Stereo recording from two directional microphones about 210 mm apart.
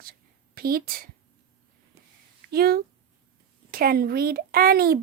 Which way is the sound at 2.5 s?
45° right (ahead or behind).